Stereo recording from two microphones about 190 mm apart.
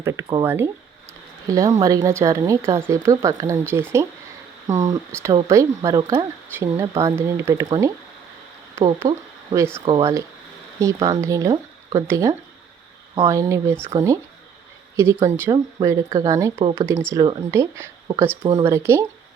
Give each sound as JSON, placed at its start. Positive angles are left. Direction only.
{"t": 0.0, "sound": "speech", "side_deg": -15}
{"t": 6.5, "sound": "speech", "side_deg": -10}
{"t": 9.0, "sound": "speech", "side_deg": -15}